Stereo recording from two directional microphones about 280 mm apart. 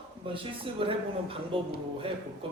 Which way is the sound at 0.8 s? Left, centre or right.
Centre.